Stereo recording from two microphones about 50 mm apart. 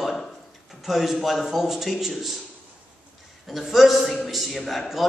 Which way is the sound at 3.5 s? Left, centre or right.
Centre.